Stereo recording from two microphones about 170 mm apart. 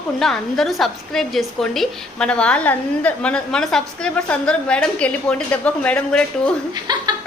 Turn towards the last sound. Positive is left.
turn(degrees=-25)  # may be behind; listen again after turning